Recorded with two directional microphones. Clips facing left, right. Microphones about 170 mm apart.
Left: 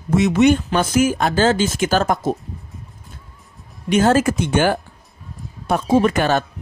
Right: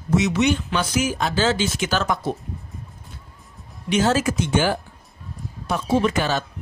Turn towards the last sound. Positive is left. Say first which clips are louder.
# left 5 dB
turn(degrees=55)  # may be behind; listen again after turning